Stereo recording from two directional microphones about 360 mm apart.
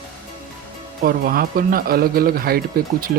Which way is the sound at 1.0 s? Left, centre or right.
Right.